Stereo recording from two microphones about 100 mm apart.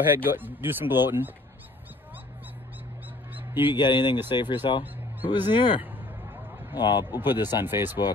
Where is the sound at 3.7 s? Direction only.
50° left (ahead or behind).